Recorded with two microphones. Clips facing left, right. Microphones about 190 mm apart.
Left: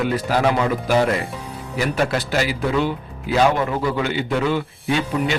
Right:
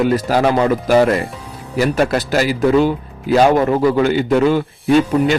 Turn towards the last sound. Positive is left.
turn(degrees=-45)  # may be behind; listen again after turning